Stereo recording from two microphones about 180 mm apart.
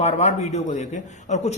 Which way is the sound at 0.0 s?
40° left (ahead or behind).